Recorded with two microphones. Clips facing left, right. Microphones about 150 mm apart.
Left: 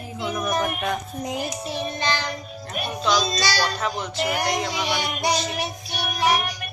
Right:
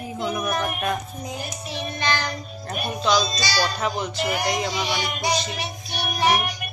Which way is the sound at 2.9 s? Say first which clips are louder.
Even; centre (ahead or behind).